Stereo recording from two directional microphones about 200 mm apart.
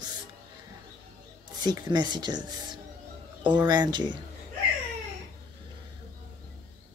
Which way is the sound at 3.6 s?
20° right (ahead or behind).